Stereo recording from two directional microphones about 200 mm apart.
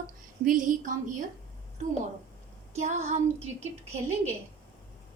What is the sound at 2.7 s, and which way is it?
Speech, 35° right (ahead or behind).